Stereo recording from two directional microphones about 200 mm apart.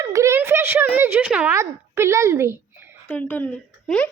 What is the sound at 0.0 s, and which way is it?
Speech, 15° right (ahead or behind).